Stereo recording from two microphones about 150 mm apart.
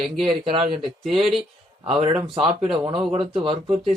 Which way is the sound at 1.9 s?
35° right (ahead or behind).